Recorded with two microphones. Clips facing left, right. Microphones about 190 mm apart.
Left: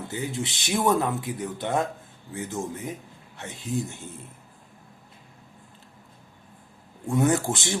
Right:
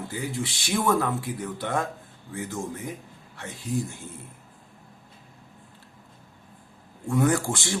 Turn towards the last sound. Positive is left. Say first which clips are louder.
# left 1 dB
turn(degrees=20)  # may be behind; listen again after turning